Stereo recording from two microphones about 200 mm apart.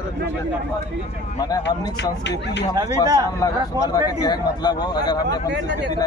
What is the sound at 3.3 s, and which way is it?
Speech, 15° left (ahead or behind).